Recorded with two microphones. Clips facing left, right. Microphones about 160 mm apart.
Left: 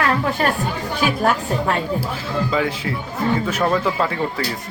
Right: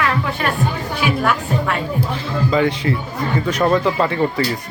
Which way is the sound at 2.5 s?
Centre (ahead or behind).